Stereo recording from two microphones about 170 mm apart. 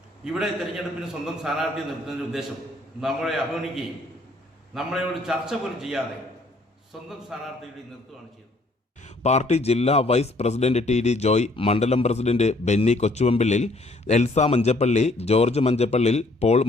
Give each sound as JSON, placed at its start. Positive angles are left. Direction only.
{"t": 0.3, "sound": "a man's voice", "side_deg": 0}
{"t": 9.0, "sound": "a man's voice", "side_deg": 40}